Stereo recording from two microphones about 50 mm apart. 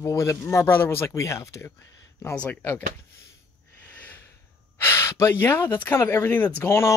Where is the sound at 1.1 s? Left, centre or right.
Left.